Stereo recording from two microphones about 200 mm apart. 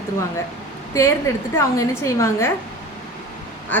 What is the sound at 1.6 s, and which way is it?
Speech, 15° left (ahead or behind).